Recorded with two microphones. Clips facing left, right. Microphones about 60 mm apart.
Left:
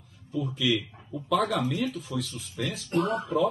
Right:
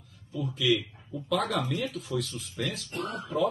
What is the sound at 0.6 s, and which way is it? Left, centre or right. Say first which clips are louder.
Speech: right 2 dB; centre.